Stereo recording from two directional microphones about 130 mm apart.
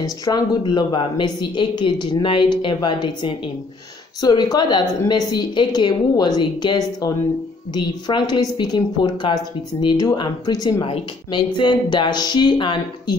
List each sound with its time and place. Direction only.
0.0 s speech: 30° left (ahead or behind)